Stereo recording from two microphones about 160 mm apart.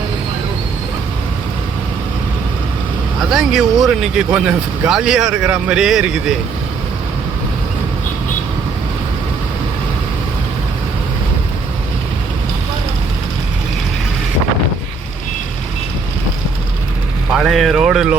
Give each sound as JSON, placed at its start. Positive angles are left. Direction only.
{"t": 3.2, "sound": "speech", "side_deg": 0}
{"t": 17.3, "sound": "speech", "side_deg": -5}